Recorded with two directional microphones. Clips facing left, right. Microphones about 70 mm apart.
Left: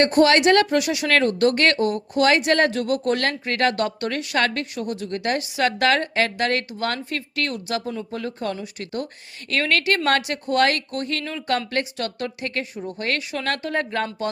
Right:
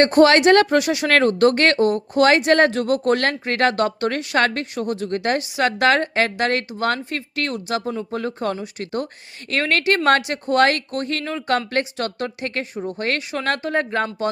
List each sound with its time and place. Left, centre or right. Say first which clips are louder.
0.0 s speech: right 3 dB; right
5.4 s speech: right 2 dB; right